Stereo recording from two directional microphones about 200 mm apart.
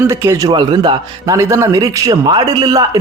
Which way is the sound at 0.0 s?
15° right (ahead or behind).